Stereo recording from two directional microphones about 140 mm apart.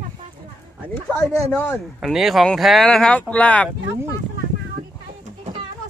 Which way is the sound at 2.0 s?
Centre (ahead or behind).